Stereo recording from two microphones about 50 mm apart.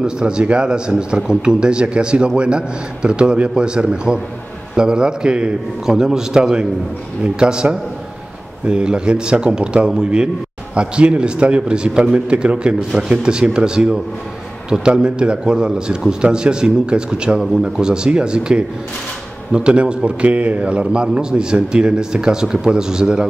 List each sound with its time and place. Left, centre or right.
0.0 s a man's voice: centre